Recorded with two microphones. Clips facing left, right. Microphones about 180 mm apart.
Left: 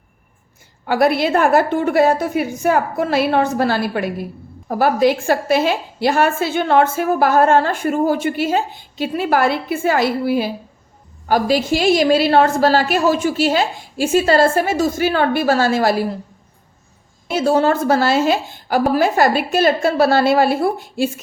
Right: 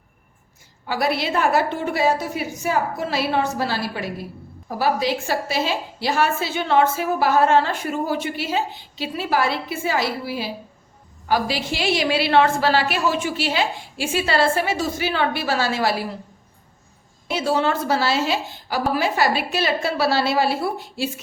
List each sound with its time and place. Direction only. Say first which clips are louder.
0.9 s a woman's voice: left 7 dB; 55° left (ahead or behind)
17.2 s a woman's voice: left 6 dB; 45° left (ahead or behind)